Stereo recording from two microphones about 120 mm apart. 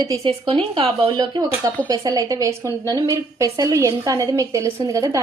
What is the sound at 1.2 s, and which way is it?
A woman's voice, 35° right (ahead or behind).